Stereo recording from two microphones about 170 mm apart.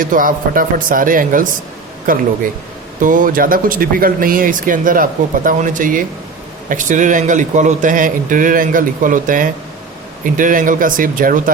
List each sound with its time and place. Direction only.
0.0 s a man's voice: 55° right (ahead or behind)